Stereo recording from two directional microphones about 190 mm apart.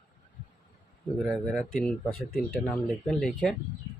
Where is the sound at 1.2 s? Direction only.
Centre (ahead or behind).